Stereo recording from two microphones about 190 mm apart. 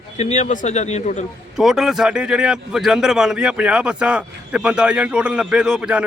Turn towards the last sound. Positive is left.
turn(degrees=-5)  # may be behind; listen again after turning